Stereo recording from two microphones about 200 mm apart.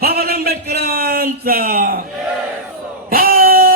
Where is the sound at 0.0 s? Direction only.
50° right (ahead or behind).